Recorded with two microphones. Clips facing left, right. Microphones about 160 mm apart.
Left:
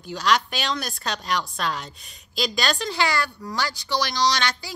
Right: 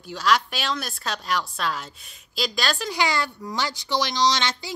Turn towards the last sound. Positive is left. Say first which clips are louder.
# right 1 dB
turn(degrees=-20)  # may be behind; listen again after turning